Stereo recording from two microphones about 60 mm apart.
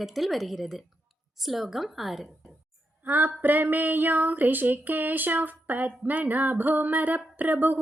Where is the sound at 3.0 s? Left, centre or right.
Right.